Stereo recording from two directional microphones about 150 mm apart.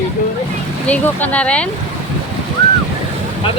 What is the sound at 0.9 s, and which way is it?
Speech, 10° left (ahead or behind).